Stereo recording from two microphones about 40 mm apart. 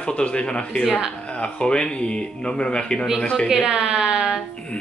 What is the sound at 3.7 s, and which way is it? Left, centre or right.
Speech, centre.